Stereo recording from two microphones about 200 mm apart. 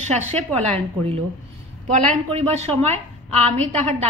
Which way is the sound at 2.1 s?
30° right (ahead or behind).